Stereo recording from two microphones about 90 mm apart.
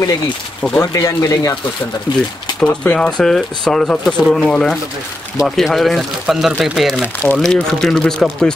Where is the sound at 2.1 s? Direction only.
55° left (ahead or behind).